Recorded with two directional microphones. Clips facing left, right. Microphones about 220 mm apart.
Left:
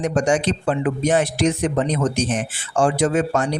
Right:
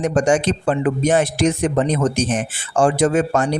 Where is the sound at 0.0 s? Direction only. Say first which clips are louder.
Right 2 dB; 50° right (ahead or behind).